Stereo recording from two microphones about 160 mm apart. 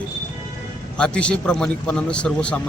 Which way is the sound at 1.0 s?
5° left (ahead or behind).